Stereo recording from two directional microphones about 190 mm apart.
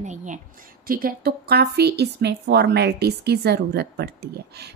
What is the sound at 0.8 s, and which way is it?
A woman's voice, 50° right (ahead or behind).